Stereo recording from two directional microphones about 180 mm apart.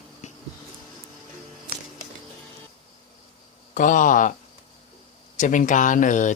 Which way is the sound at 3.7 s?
45° left (ahead or behind).